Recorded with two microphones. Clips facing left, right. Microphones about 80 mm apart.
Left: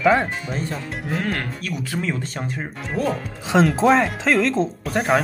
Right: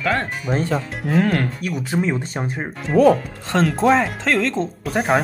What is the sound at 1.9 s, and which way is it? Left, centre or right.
Speech, right.